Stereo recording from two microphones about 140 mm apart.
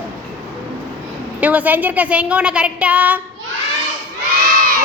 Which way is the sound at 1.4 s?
10° right (ahead or behind).